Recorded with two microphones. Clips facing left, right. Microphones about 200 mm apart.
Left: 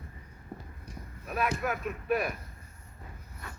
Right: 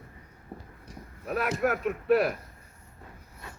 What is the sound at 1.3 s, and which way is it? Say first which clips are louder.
Speech: right 4 dB; 75° right (ahead or behind).